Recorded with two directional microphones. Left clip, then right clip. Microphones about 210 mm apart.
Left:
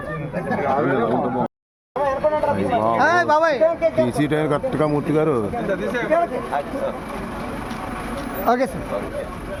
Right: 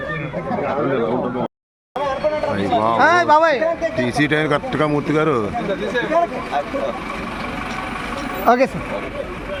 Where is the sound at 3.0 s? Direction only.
30° right (ahead or behind).